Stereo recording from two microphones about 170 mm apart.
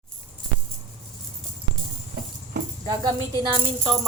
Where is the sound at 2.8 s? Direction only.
25° right (ahead or behind).